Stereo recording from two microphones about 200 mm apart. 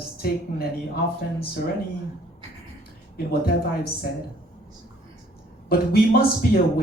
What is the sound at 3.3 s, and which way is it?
Speech, 50° left (ahead or behind).